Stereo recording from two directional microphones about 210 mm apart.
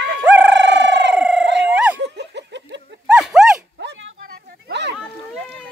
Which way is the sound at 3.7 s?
60° right (ahead or behind).